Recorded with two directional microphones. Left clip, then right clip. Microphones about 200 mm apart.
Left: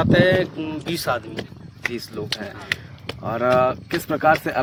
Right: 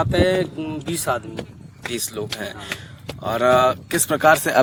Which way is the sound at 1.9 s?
55° right (ahead or behind).